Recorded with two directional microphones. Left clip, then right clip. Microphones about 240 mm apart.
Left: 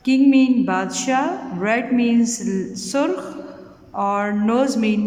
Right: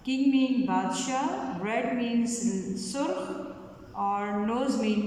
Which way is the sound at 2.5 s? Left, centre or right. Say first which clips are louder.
Left 8 dB; left.